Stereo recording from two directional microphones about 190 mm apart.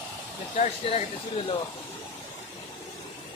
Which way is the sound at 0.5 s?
35° left (ahead or behind).